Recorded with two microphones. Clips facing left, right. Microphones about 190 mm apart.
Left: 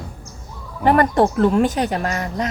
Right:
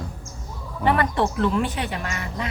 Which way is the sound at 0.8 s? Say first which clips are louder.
Left 6 dB; 45° left (ahead or behind).